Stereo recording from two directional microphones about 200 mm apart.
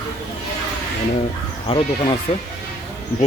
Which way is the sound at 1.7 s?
30° left (ahead or behind).